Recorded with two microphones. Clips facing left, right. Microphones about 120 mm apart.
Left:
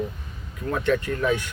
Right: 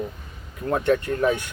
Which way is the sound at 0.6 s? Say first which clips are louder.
Right 2 dB; 40° right (ahead or behind).